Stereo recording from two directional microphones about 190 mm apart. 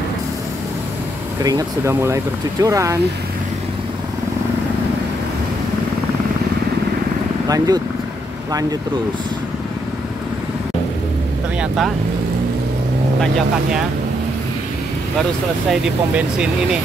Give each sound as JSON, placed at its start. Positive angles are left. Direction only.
{"t": 1.4, "sound": "speech", "side_deg": -15}
{"t": 7.4, "sound": "speech", "side_deg": -20}
{"t": 11.6, "sound": "speech", "side_deg": 0}
{"t": 15.7, "sound": "speech", "side_deg": -5}